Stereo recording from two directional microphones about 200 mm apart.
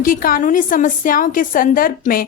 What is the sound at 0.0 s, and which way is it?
A woman's voice, 45° left (ahead or behind).